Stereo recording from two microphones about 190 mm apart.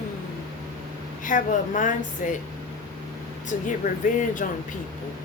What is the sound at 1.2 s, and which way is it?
A woman's voice, 45° left (ahead or behind).